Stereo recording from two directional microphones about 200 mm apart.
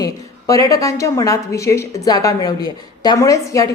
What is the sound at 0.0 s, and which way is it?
A woman's voice, 15° left (ahead or behind).